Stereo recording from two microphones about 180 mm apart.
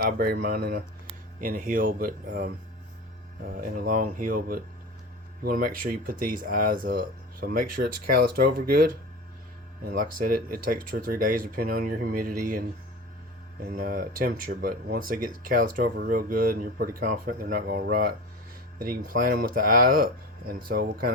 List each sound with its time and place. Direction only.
0.0 s speech: 60° right (ahead or behind)
3.6 s speech: 50° right (ahead or behind)
13.7 s speech: 55° right (ahead or behind)